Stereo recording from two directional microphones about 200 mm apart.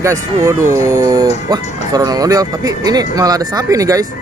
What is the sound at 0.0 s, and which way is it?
Speech, 15° right (ahead or behind).